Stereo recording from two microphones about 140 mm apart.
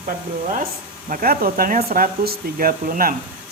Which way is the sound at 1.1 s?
90° right.